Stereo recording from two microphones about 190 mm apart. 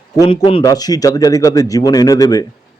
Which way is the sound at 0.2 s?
25° left (ahead or behind).